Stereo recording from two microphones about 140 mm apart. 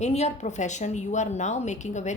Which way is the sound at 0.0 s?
50° left (ahead or behind).